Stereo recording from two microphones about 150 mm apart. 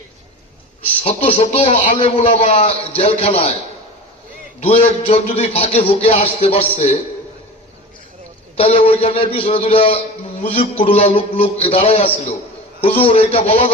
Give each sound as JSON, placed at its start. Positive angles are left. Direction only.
{"t": 1.0, "sound": "a man's voice", "side_deg": 40}
{"t": 4.6, "sound": "a man's voice", "side_deg": 45}
{"t": 8.5, "sound": "a man's voice", "side_deg": 40}